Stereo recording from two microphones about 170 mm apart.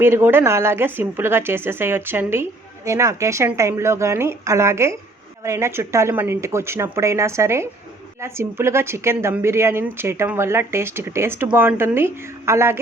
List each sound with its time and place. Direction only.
0.0 s speech: 15° right (ahead or behind)